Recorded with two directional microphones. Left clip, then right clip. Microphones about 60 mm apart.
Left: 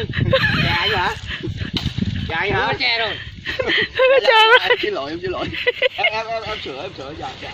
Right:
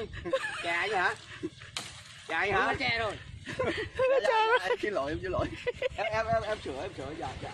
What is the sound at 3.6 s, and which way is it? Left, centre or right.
Speech, left.